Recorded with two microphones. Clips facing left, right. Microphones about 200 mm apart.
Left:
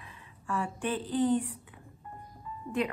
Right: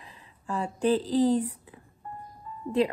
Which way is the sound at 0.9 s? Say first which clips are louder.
Right 6 dB; 35° right (ahead or behind).